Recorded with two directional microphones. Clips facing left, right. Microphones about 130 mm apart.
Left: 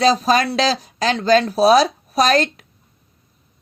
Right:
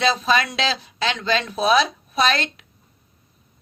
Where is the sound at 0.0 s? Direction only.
40° left (ahead or behind).